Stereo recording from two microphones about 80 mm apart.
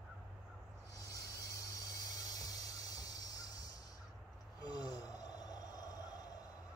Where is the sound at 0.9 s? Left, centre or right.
Left.